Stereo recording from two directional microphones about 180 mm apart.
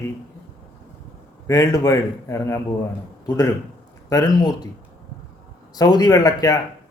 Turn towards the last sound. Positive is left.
turn(degrees=20)  # may be behind; listen again after turning